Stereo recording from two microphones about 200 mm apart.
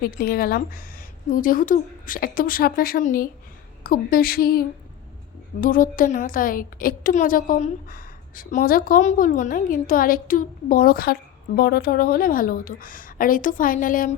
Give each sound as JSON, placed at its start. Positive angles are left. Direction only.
{"t": 0.0, "sound": "a woman's voice", "side_deg": 50}